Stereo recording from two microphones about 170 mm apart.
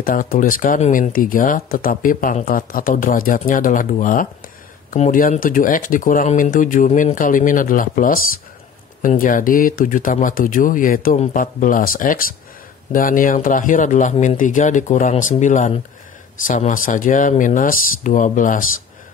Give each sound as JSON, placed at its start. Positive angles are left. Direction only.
{"t": 0.0, "sound": "speech", "side_deg": 55}